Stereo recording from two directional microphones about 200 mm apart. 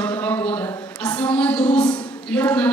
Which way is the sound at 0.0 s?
10° left (ahead or behind).